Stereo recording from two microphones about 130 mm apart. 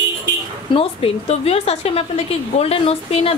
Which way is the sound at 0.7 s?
50° left (ahead or behind).